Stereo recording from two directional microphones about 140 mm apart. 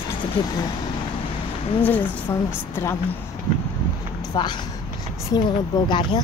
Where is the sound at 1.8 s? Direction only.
10° left (ahead or behind).